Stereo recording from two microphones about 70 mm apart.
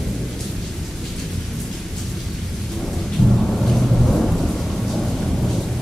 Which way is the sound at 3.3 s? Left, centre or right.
Centre.